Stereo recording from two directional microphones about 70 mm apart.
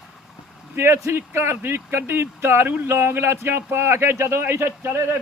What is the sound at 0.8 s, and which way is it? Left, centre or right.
Speech, right.